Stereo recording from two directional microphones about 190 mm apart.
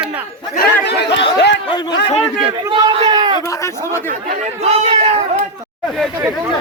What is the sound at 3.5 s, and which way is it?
Speech, 15° left (ahead or behind).